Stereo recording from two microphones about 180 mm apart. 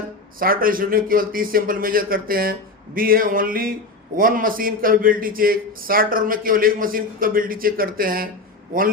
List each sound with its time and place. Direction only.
0.3 s a man's voice: 55° right (ahead or behind)